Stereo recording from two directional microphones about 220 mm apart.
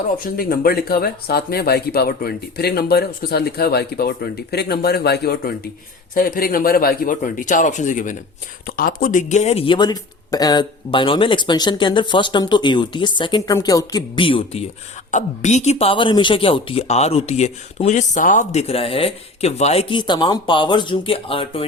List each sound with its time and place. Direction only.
0.2 s a man's voice: 40° left (ahead or behind); by 21.7 s 25° left (ahead or behind)